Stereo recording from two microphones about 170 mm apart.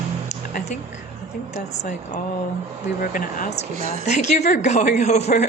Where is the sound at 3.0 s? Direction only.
50° left (ahead or behind).